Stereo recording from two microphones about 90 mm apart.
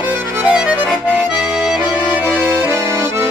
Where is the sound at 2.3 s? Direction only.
25° right (ahead or behind).